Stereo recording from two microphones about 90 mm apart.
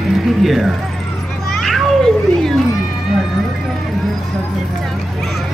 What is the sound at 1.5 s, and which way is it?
Children playing, centre (ahead or behind).